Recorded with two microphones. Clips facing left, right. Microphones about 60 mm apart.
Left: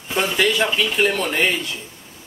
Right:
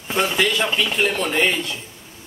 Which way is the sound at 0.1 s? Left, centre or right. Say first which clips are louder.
Left 1 dB; centre.